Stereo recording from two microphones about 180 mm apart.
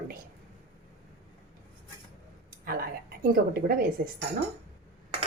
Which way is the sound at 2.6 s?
55° right (ahead or behind).